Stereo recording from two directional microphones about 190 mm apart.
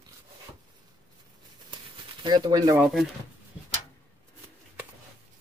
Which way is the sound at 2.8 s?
Centre (ahead or behind).